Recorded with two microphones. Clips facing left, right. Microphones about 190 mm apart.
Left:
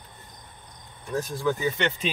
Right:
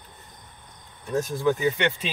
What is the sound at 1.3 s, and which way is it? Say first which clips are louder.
Speech: right 3 dB; 15° right (ahead or behind).